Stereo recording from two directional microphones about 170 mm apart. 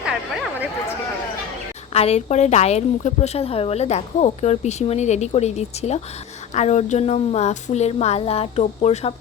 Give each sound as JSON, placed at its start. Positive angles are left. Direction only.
{"t": 0.0, "sound": "chatter", "side_deg": -5}
{"t": 1.9, "sound": "a woman's voice", "side_deg": 35}